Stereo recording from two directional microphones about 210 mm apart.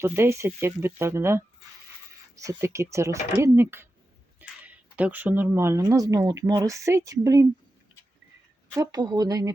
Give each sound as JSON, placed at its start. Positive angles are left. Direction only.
{"t": 0.0, "sound": "speech", "side_deg": -10}
{"t": 8.7, "sound": "speech", "side_deg": -20}